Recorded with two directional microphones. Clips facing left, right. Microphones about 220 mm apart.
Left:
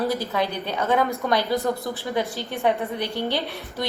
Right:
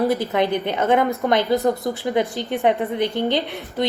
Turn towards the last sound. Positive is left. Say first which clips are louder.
# right 5 dB
turn(degrees=-20)  # may be behind; listen again after turning